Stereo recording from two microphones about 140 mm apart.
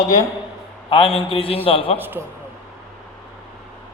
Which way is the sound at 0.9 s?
40° left (ahead or behind).